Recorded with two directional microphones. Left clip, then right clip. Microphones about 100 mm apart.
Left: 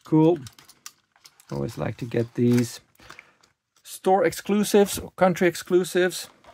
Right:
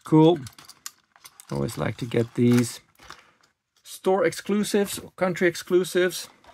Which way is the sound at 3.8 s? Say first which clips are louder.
Left 2 dB; 5° left (ahead or behind).